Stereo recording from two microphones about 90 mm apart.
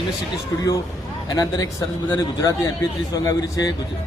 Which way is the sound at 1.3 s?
40° left (ahead or behind).